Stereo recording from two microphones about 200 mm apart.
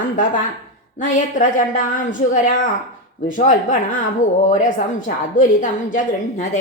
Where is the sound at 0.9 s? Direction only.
40° left (ahead or behind).